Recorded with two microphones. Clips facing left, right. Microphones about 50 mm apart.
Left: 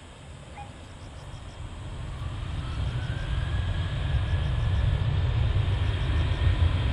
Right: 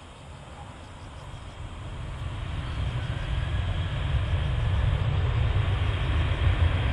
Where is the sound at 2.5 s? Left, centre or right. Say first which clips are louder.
Right 1 dB; right.